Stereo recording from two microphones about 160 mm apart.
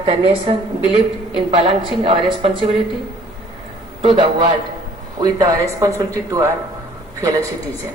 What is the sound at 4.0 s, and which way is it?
A woman's voice, 35° right (ahead or behind).